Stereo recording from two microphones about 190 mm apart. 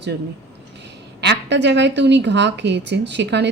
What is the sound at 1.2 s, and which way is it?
Speech, 65° right (ahead or behind).